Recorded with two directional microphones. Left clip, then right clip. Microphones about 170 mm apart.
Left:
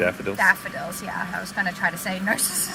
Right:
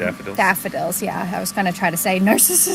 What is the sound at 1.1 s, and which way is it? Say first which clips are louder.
A woman's voice: right 4 dB; 70° right (ahead or behind).